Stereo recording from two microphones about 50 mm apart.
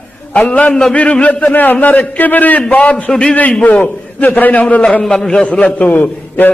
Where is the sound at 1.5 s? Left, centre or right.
Left.